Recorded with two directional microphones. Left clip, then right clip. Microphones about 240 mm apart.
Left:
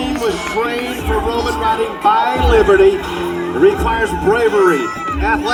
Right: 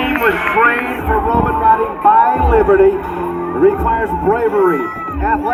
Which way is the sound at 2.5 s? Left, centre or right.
Left.